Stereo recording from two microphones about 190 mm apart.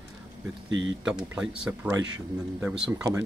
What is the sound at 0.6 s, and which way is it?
Speech, 80° right.